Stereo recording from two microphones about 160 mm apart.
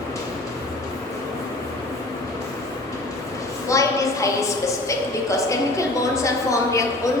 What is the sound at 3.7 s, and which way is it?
A woman's voice, 20° left (ahead or behind).